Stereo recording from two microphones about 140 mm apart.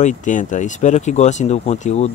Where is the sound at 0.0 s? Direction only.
60° left (ahead or behind).